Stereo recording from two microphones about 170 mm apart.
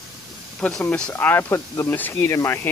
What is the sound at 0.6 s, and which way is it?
Speech, 5° left (ahead or behind).